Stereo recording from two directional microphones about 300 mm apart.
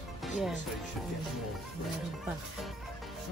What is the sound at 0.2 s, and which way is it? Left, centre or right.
Music, centre.